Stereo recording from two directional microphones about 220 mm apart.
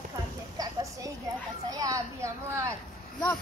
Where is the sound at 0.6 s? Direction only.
15° right (ahead or behind).